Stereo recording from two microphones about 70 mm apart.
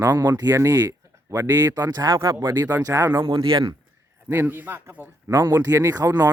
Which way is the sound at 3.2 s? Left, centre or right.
Right.